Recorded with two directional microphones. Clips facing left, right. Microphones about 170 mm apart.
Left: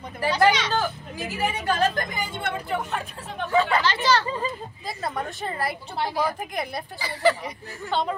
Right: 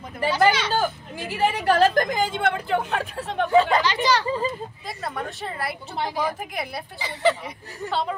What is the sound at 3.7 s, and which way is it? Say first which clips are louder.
Speech: right 1 dB; 15° right (ahead or behind).